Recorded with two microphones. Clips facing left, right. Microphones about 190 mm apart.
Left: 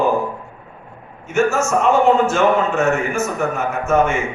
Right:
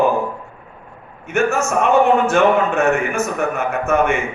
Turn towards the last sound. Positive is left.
turn(degrees=-60)  # may be behind; listen again after turning